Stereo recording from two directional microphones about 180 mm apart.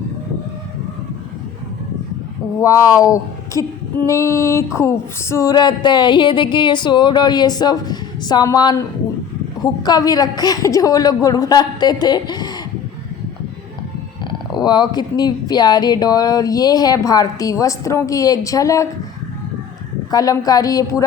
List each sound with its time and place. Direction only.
2.6 s female singing: 20° left (ahead or behind)
9.8 s female singing: 20° left (ahead or behind)
14.5 s female singing: 25° left (ahead or behind)
20.1 s female singing: 20° left (ahead or behind)